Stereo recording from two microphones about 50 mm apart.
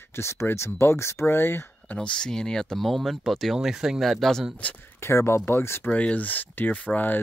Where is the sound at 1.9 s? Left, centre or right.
Centre.